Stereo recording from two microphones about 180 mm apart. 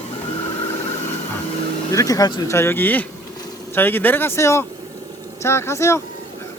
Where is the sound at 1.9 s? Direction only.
20° left (ahead or behind).